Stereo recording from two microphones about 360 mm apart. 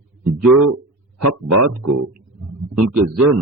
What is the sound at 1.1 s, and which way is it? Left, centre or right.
Speech, right.